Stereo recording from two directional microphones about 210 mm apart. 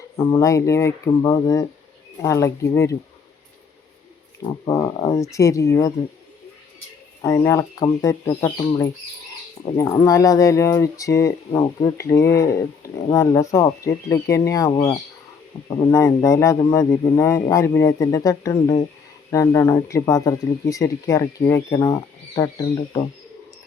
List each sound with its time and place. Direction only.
0.2 s speech: 15° left (ahead or behind)
4.6 s speech: 20° left (ahead or behind)
7.2 s speech: 15° left (ahead or behind)